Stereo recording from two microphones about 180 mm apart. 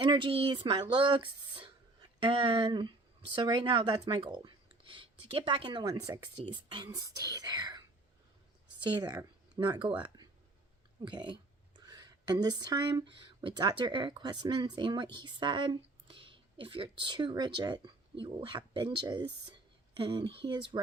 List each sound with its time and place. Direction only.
0.0 s speech: 25° right (ahead or behind)
8.8 s speech: 20° right (ahead or behind)
11.0 s speech: 25° right (ahead or behind)